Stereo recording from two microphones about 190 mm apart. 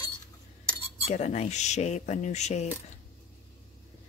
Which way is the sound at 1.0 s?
35° left (ahead or behind).